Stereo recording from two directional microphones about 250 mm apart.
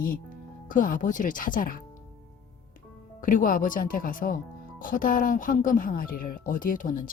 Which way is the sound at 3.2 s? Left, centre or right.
Left.